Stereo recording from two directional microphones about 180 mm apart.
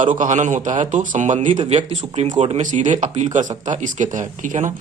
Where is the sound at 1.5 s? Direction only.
30° right (ahead or behind).